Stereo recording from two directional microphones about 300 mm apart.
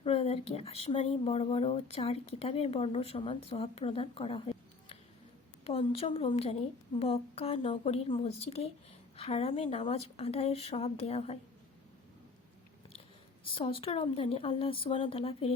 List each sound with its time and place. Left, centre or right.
0.0 s speech: centre
5.6 s speech: centre
13.5 s speech: centre